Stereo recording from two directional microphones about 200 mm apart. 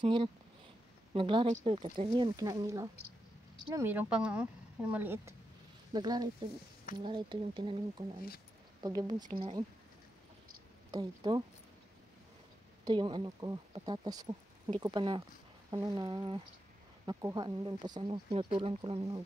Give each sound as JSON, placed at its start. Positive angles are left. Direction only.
{"t": 0.0, "sound": "a woman's voice", "side_deg": -25}
{"t": 8.8, "sound": "speech", "side_deg": -20}
{"t": 10.9, "sound": "speech", "side_deg": -20}
{"t": 12.8, "sound": "speech", "side_deg": -20}